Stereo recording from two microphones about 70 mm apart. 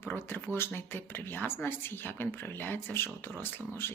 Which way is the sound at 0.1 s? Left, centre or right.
Left.